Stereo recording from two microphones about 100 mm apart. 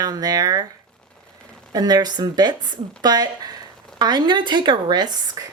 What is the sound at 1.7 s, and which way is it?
Speech, 40° right (ahead or behind).